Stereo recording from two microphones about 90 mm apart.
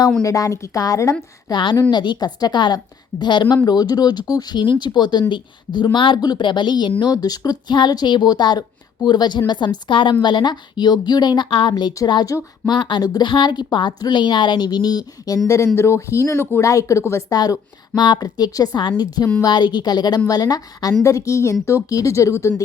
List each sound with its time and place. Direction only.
0.2 s speech: 40° left (ahead or behind)
1.5 s a woman's voice: 55° left (ahead or behind)
7.0 s a woman's voice: 45° left (ahead or behind)
15.4 s speech: 35° left (ahead or behind)
17.3 s speech: 50° left (ahead or behind); by 22.6 s 30° left (ahead or behind)